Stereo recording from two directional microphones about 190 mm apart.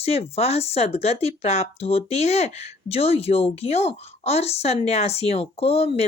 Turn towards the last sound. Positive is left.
turn(degrees=30)  # may be behind; listen again after turning